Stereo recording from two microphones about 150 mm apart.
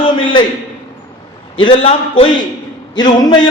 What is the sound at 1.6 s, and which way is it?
Speech, 40° left (ahead or behind).